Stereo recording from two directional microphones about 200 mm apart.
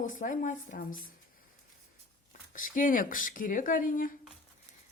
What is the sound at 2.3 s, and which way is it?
Speech, 40° left (ahead or behind).